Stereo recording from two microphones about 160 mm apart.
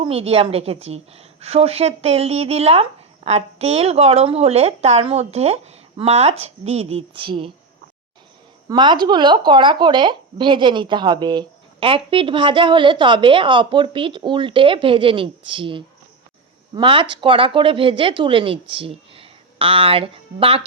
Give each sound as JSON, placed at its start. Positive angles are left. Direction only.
{"t": 0.0, "sound": "speech", "side_deg": -35}
{"t": 8.7, "sound": "speech", "side_deg": -30}